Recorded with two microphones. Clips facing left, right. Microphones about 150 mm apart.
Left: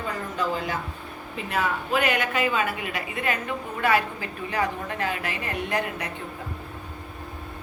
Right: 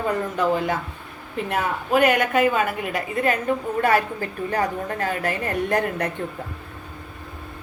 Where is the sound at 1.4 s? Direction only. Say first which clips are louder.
Right 3 dB; 50° right (ahead or behind).